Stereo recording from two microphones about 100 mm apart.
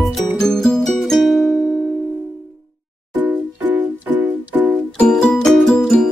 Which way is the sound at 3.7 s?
15° right (ahead or behind).